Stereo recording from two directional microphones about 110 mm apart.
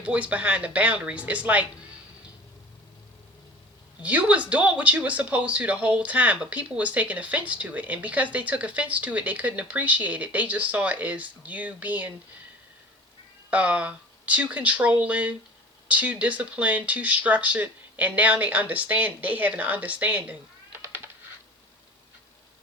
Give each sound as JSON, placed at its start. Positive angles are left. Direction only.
{"t": 0.0, "sound": "speech", "side_deg": -10}
{"t": 4.0, "sound": "speech", "side_deg": -15}
{"t": 13.5, "sound": "speech", "side_deg": -15}
{"t": 20.7, "sound": "typewriter", "side_deg": -20}